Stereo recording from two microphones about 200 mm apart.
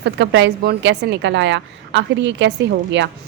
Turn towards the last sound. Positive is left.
turn(degrees=-60)  # may be behind; listen again after turning